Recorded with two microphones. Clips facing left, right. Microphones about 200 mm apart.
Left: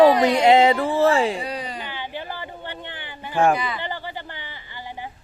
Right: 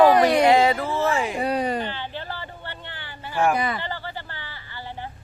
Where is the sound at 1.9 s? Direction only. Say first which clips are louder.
Left 1 dB; 15° left (ahead or behind).